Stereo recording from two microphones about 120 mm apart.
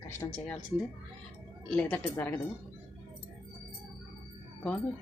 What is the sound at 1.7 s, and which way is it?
Speech, 15° left (ahead or behind).